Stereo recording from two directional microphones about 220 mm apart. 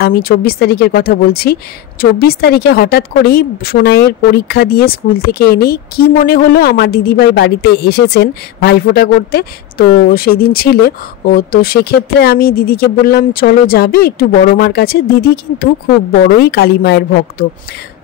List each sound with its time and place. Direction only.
0.0 s speech: 45° left (ahead or behind)